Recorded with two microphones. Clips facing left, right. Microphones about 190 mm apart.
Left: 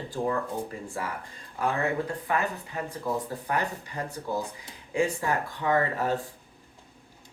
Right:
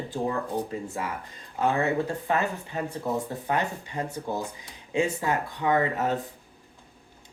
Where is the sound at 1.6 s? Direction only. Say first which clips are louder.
Right 3 dB; 25° right (ahead or behind).